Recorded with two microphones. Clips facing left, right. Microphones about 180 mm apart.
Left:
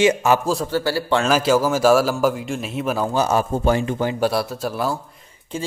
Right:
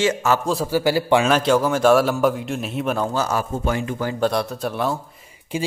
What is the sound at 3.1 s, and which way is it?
Speech, 20° left (ahead or behind).